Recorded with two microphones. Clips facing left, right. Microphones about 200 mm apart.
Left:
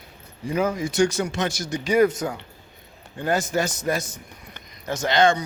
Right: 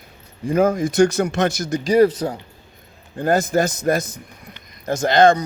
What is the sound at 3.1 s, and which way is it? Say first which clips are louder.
A man's voice: right 5 dB; 50° right (ahead or behind).